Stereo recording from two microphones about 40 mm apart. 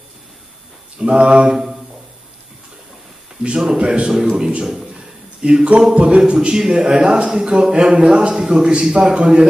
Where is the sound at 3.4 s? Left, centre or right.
Right.